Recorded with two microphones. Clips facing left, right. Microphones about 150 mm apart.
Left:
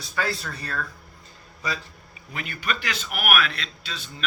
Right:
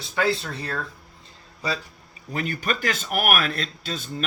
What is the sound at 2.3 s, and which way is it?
Speech, 40° right (ahead or behind).